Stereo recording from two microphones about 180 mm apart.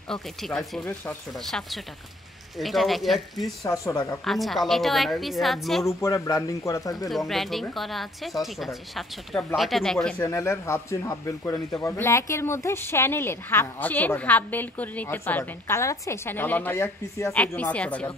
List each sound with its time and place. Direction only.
0.1 s speech: centre (ahead or behind)
3.6 s speech: 15° left (ahead or behind)
4.2 s speech: centre (ahead or behind)
5.9 s speech: 15° left (ahead or behind)
7.1 s speech: centre (ahead or behind)
10.3 s speech: 15° left (ahead or behind)